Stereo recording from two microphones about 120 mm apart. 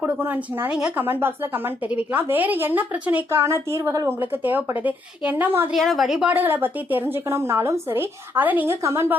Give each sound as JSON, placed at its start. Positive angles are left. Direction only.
{"t": 0.2, "sound": "a woman's voice", "side_deg": -15}
{"t": 4.2, "sound": "a woman's voice", "side_deg": -15}
{"t": 5.7, "sound": "a woman's voice", "side_deg": 0}
{"t": 6.3, "sound": "a woman's voice", "side_deg": -15}